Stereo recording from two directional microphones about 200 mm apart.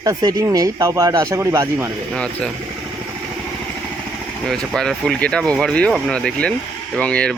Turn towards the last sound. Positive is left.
turn(degrees=5)  # may be behind; listen again after turning